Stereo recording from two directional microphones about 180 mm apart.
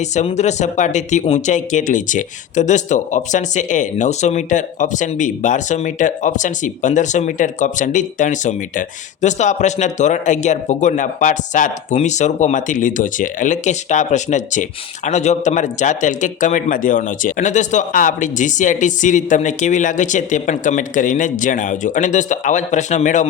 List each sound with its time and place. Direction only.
0.0 s speech: 40° left (ahead or behind)